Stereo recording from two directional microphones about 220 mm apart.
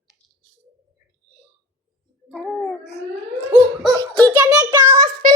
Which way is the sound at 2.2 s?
Centre (ahead or behind).